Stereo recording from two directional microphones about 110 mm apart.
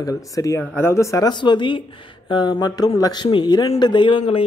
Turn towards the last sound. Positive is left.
turn(degrees=45)  # may be behind; listen again after turning